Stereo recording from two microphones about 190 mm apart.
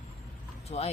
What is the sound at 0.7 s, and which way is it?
Speech, 35° left (ahead or behind).